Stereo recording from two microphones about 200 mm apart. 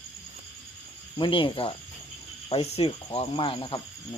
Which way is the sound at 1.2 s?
25° left (ahead or behind).